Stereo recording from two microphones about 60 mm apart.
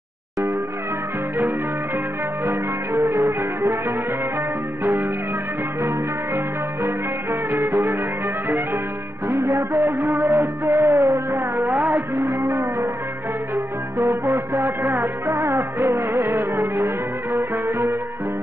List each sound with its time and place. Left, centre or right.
2.4 s music: right
5.8 s music: right
9.3 s music: right
9.8 s music: right
11.0 s a sound: right
12.2 s a sound: right
14.8 s music: right
16.0 s music: right
16.5 s music: right